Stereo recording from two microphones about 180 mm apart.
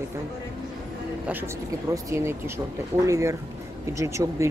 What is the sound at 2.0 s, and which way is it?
Speech, 15° right (ahead or behind).